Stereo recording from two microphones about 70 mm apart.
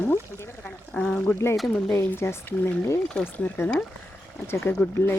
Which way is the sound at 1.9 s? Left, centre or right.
Left.